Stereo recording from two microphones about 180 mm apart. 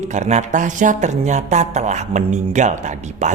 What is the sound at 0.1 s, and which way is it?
Speech, 40° right (ahead or behind).